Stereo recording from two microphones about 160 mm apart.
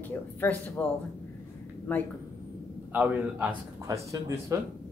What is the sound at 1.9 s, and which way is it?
Speech, 10° left (ahead or behind).